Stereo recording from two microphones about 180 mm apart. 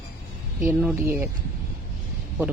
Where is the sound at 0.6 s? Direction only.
10° right (ahead or behind).